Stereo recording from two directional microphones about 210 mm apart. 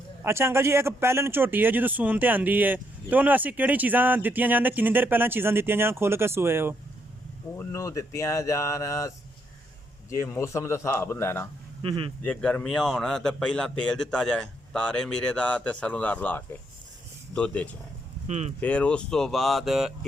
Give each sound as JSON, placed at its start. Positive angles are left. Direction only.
{"t": 0.2, "sound": "speech", "side_deg": -10}
{"t": 7.5, "sound": "speech", "side_deg": 15}
{"t": 11.8, "sound": "speech", "side_deg": -25}
{"t": 12.2, "sound": "a man's voice", "side_deg": 5}
{"t": 18.3, "sound": "speech", "side_deg": -30}
{"t": 18.6, "sound": "a man's voice", "side_deg": 5}